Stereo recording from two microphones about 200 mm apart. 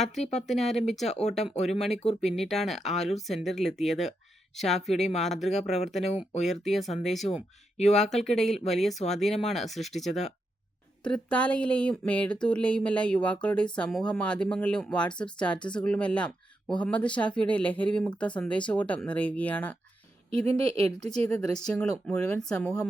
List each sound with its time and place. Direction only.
0.0 s speech: centre (ahead or behind)
1.0 s speech: 35° left (ahead or behind)
2.2 s speech: centre (ahead or behind)
4.9 s speech: 35° left (ahead or behind)
5.2 s speech: centre (ahead or behind)
7.3 s speech: 35° left (ahead or behind)
8.1 s speech: centre (ahead or behind)
21.2 s speech: 5° left (ahead or behind)